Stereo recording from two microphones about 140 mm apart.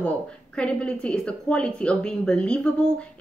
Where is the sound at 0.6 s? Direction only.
5° left (ahead or behind).